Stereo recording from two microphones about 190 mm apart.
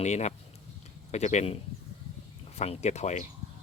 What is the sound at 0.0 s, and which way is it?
Speech, 35° left (ahead or behind).